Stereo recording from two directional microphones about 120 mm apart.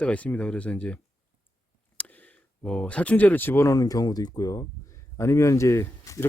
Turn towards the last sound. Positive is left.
turn(degrees=25)  # may be behind; listen again after turning